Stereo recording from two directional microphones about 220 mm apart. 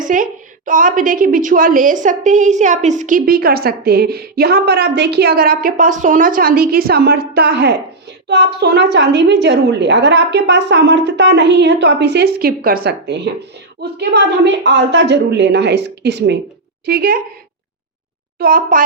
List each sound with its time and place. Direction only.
0.0 s a woman's voice: 35° right (ahead or behind)
18.3 s a woman's voice: 40° right (ahead or behind)